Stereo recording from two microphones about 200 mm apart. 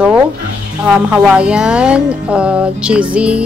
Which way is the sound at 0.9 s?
5° right (ahead or behind).